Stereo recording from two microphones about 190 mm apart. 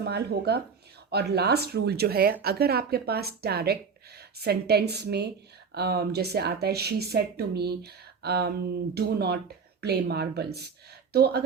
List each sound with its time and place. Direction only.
0.0 s speech: 60° right (ahead or behind)